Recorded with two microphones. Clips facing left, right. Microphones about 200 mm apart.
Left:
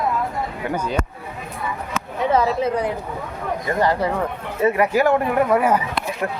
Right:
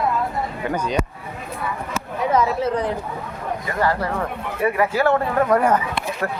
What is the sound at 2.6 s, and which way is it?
Speech, 10° left (ahead or behind).